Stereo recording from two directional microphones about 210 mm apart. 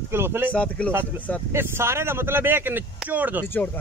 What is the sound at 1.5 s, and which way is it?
Speech, 10° right (ahead or behind).